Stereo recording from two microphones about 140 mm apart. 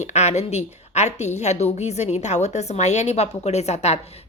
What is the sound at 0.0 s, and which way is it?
A woman's voice, 55° left (ahead or behind).